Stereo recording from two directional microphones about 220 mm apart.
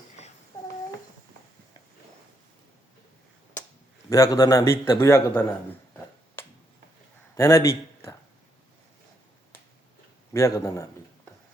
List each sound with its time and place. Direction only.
0.5 s a sound: 15° left (ahead or behind)
4.1 s a man's voice: 15° left (ahead or behind)
7.3 s a man's voice: 15° left (ahead or behind)
10.3 s a man's voice: 15° left (ahead or behind)